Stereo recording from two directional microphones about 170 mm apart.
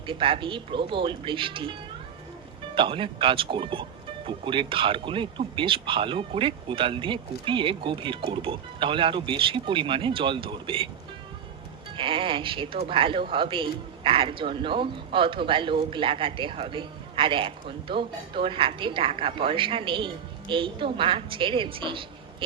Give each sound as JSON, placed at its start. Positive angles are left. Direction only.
{"t": 0.0, "sound": "speech", "side_deg": -30}
{"t": 2.7, "sound": "speech", "side_deg": -30}
{"t": 11.9, "sound": "speech", "side_deg": -30}